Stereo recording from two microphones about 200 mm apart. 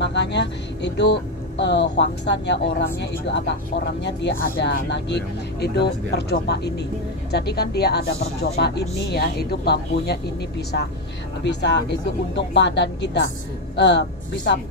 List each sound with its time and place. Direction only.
0.0 s speech: 60° left (ahead or behind)
11.4 s speech: 60° left (ahead or behind)